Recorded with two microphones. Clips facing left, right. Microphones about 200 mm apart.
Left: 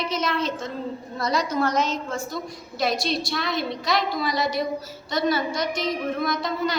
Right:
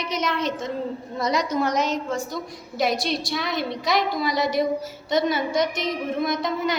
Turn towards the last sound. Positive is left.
turn(degrees=-20)  # may be behind; listen again after turning